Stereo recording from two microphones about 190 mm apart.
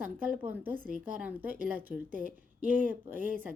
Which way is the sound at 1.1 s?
10° right (ahead or behind).